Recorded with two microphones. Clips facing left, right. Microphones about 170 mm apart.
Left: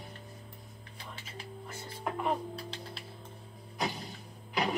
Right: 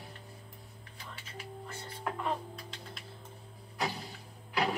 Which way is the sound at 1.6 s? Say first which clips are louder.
Left 1 dB; 15° left (ahead or behind).